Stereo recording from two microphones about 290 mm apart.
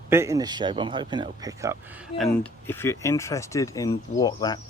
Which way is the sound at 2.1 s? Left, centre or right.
Centre.